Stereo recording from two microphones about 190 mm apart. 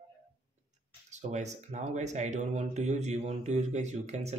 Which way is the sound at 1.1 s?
40° right (ahead or behind).